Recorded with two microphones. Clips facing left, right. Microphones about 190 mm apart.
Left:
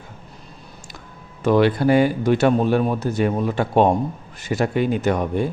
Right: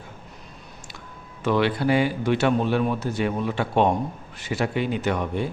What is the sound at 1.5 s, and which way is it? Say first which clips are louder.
A man's voice: left 5 dB; 45° left (ahead or behind).